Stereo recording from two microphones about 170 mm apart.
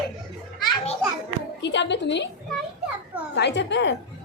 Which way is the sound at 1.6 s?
90° left.